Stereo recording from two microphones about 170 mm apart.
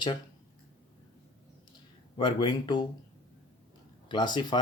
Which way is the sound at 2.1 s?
25° left (ahead or behind).